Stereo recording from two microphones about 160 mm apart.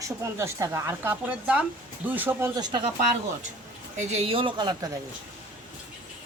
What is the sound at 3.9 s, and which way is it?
Speech, 40° right (ahead or behind).